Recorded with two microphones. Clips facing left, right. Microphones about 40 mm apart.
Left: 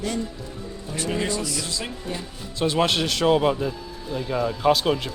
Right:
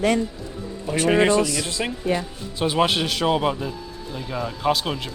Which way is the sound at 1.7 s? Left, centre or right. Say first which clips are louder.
Right 4 dB; right.